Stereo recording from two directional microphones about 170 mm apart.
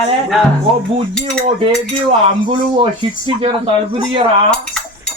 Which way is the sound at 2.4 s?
30° right (ahead or behind).